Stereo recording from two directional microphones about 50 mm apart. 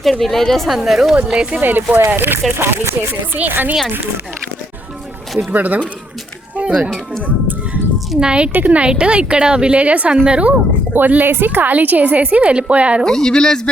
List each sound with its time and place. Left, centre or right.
0.0 s a woman's voice: centre
1.1 s a woman's voice: right
1.6 s a woman's voice: right
3.3 s a woman's voice: right
5.5 s a woman's voice: right
6.6 s speech: right
7.2 s a woman's voice: right
8.2 s a woman's voice: centre
10.9 s a woman's voice: right
13.1 s speech: centre